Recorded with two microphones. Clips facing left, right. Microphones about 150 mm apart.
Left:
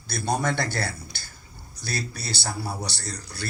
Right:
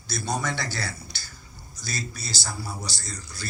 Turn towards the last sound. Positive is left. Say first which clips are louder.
# left 3 dB
turn(degrees=65)  # may be behind; listen again after turning